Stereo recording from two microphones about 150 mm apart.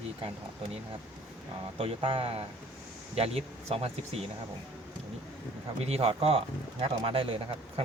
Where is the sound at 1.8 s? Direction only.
40° right (ahead or behind).